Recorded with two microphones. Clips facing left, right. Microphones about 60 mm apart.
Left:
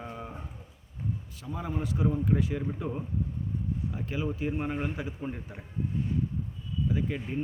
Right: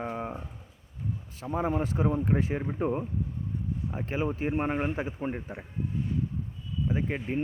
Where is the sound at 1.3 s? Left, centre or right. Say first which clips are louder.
Right 8 dB; right.